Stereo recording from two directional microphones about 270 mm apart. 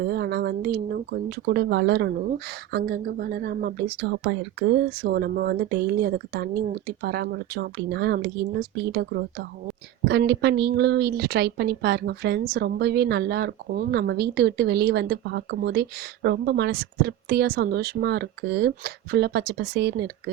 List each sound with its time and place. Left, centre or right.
0.0 s speech: right